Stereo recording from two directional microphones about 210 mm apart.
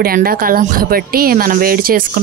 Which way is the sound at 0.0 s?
45° right (ahead or behind).